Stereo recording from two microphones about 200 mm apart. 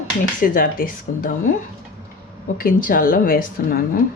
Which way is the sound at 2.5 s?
45° left (ahead or behind).